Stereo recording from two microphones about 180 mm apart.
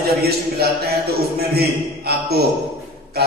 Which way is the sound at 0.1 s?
60° right (ahead or behind).